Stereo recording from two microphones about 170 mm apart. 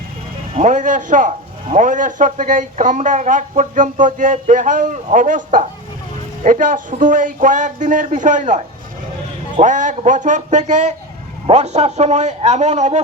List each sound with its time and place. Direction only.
0.5 s a man's voice: 45° right (ahead or behind)